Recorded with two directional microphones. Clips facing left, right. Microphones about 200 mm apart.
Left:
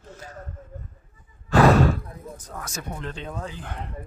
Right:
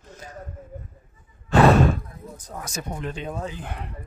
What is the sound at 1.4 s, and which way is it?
Sigh, 25° right (ahead or behind).